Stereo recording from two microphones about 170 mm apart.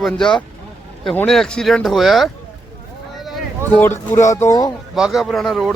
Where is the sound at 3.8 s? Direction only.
15° left (ahead or behind).